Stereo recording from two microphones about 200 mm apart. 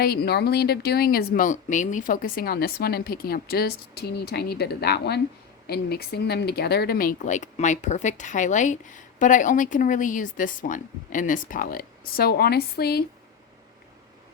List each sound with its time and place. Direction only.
0.0 s speech: 50° left (ahead or behind)